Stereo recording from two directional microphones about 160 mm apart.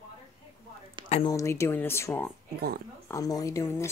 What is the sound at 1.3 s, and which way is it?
Speech, 20° left (ahead or behind).